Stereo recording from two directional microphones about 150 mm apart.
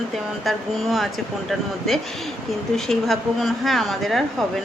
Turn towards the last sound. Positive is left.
turn(degrees=0)  # may be behind; listen again after turning